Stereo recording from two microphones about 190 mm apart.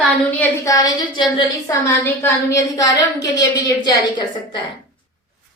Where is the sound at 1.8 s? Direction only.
10° left (ahead or behind).